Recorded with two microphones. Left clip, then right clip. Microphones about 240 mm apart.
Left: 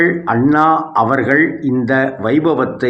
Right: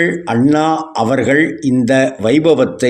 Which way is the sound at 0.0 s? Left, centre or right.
Right.